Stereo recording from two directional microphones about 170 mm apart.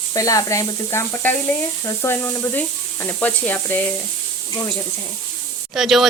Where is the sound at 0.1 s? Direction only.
20° left (ahead or behind).